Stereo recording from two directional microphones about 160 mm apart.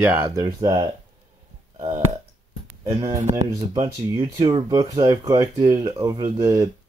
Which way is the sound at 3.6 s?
20° right (ahead or behind).